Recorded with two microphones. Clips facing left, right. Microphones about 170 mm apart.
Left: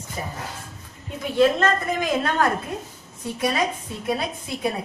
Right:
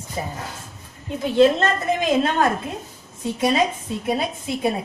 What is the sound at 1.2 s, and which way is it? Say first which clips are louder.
A woman's voice: right 3 dB; 25° right (ahead or behind).